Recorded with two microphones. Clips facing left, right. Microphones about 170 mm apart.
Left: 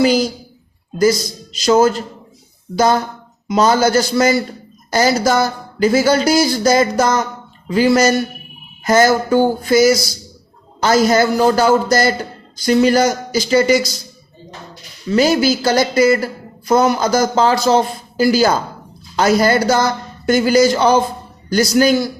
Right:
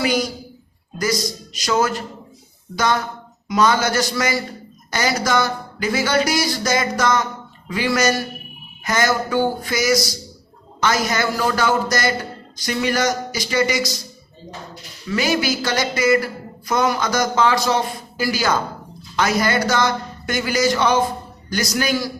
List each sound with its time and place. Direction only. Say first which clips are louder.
0.0 s a man's voice: left 7 dB; 30° left (ahead or behind)
15.1 s speech: left 7 dB; 35° left (ahead or behind)